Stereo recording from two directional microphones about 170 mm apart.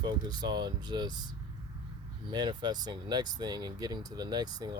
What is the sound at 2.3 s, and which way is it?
Speech, 25° right (ahead or behind).